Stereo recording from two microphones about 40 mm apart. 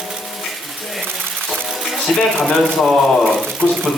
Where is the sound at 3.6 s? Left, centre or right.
Centre.